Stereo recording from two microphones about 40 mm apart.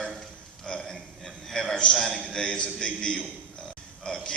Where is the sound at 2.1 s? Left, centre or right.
Left.